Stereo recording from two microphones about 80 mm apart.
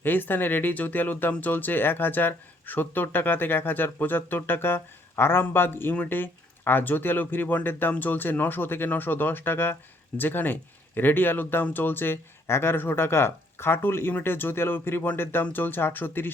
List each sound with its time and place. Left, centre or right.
0.0 s speech: left